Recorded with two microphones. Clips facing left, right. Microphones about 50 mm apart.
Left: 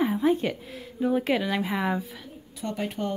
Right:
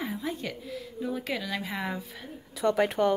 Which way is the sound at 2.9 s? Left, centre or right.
Right.